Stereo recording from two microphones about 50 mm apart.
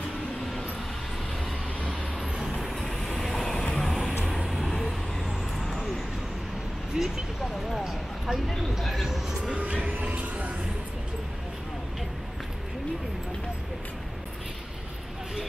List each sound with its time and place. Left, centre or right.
1.9 s vehicle: centre
2.6 s vehicle: centre
6.9 s vehicle: centre
7.7 s a sound: centre
9.4 s music: right